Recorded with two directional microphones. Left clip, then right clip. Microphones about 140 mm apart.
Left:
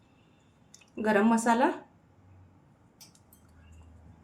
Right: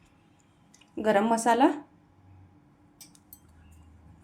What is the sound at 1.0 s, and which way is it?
Speech, 35° right (ahead or behind).